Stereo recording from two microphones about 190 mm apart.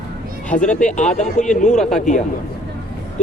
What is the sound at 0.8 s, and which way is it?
Speech, 40° left (ahead or behind).